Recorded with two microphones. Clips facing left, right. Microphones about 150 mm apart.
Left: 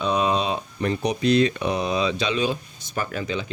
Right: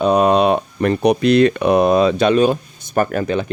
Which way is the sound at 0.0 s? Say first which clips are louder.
Right 9 dB; 55° right (ahead or behind).